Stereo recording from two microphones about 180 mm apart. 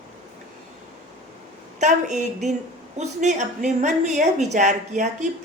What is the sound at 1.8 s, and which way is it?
A woman's voice, 40° right (ahead or behind).